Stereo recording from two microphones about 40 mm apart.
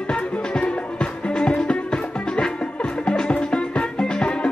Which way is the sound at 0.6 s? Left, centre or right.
Left.